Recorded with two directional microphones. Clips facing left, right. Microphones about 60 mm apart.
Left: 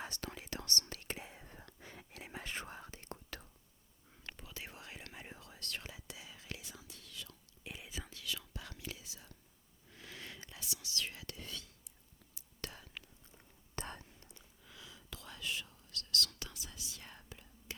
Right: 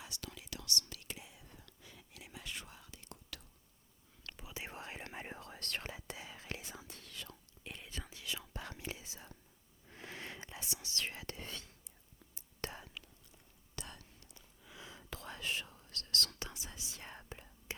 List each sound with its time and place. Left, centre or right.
0.0 s whispering: left
4.4 s whispering: centre
4.7 s whispering: right
7.6 s whispering: centre
8.1 s whispering: right
13.7 s whispering: left
14.8 s whispering: right
16.3 s whispering: right